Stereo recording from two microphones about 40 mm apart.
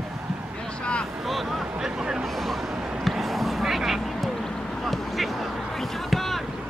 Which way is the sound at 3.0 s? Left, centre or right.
Centre.